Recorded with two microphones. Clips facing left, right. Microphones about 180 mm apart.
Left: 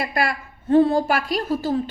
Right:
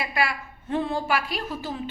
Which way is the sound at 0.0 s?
45° left (ahead or behind).